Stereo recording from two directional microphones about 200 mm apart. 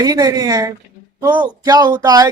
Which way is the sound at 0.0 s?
20° right (ahead or behind).